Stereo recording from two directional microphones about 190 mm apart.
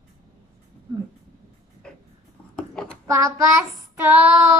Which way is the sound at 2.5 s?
Centre (ahead or behind).